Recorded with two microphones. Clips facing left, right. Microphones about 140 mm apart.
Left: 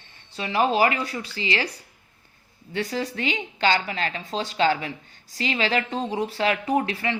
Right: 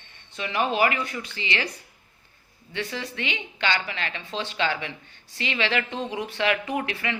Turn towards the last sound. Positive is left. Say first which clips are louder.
# left 5 dB
turn(degrees=35)  # may be behind; listen again after turning